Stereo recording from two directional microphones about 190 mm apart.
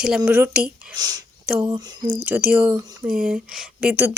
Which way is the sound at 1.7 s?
20° right (ahead or behind).